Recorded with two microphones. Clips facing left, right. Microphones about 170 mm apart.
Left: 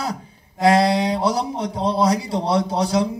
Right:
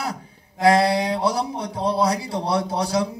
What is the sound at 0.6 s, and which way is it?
A man's voice, 20° left (ahead or behind).